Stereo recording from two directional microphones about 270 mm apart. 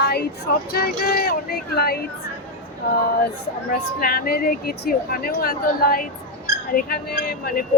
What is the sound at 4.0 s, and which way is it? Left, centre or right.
Speech, left.